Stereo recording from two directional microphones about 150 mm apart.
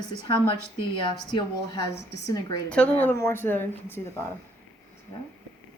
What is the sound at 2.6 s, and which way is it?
A woman's voice, 10° left (ahead or behind).